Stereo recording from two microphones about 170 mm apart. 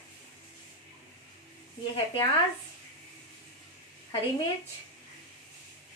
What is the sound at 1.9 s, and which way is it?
Speech, 35° left (ahead or behind).